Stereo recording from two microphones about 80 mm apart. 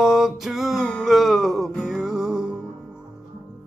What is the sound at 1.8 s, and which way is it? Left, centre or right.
Music, centre.